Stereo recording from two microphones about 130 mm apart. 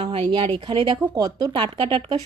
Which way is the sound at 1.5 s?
40° right (ahead or behind).